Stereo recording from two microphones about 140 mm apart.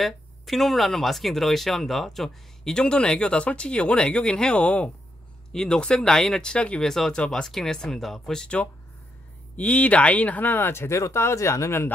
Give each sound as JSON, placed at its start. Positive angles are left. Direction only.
{"t": 0.0, "sound": "speech", "side_deg": 0}